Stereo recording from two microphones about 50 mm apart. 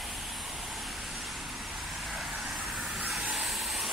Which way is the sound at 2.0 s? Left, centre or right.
Centre.